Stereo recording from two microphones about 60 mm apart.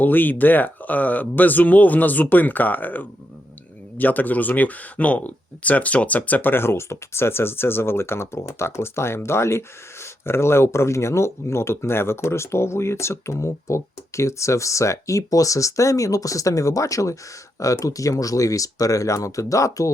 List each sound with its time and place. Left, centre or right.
0.0 s speech: left